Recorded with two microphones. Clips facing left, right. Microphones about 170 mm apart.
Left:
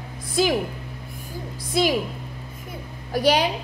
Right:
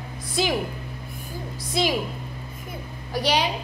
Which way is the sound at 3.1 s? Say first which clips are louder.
Left 4 dB; 50° left (ahead or behind).